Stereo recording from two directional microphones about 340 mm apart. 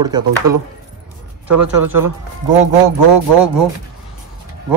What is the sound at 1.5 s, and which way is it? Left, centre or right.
Speech, right.